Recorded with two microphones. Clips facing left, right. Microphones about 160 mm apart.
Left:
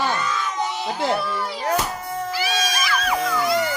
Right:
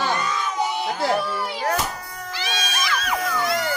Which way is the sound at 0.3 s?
10° right (ahead or behind).